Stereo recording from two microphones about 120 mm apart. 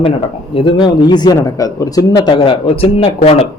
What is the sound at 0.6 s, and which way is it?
Speech, 45° left (ahead or behind).